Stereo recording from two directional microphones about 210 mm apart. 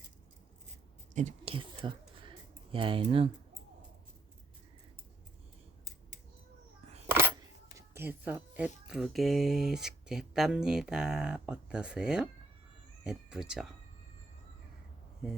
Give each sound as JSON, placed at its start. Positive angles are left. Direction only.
{"t": 1.1, "sound": "whispering", "side_deg": -30}
{"t": 7.8, "sound": "speech", "side_deg": -10}